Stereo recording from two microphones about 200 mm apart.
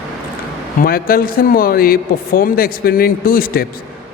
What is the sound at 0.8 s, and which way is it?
A man's voice, 45° left (ahead or behind).